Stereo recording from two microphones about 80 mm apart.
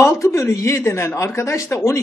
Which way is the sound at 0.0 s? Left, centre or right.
Left.